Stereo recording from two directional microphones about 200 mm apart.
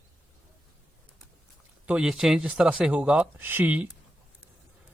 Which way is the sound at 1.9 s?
5° right (ahead or behind).